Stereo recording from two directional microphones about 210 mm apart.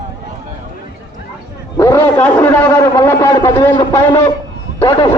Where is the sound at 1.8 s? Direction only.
10° left (ahead or behind).